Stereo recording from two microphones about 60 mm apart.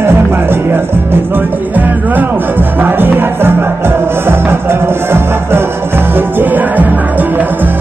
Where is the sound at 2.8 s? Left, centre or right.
Right.